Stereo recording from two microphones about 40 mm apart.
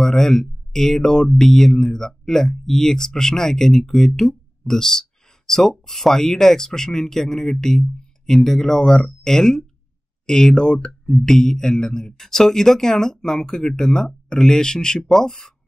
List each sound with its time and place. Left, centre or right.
0.0 s speech: centre